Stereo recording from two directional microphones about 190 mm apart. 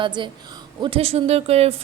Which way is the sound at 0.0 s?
25° right (ahead or behind).